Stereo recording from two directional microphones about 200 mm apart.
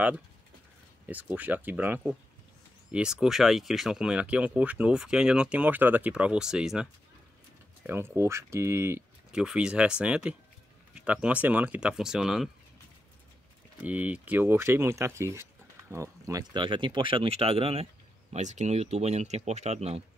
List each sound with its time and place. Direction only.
1.0 s speech: 10° right (ahead or behind)
13.8 s speech: 5° right (ahead or behind); by 20.0 s 30° right (ahead or behind)